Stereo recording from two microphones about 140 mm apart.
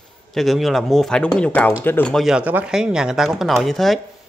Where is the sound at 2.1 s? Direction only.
5° right (ahead or behind).